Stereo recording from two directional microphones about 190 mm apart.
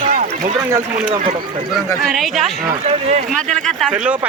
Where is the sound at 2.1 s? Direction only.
Centre (ahead or behind).